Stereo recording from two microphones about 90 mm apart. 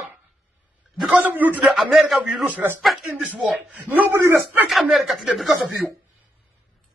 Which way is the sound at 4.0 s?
30° right (ahead or behind).